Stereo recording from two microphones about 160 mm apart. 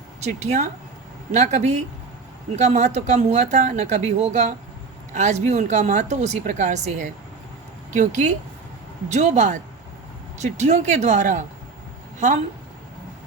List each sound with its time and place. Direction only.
0.2 s speech: 45° right (ahead or behind)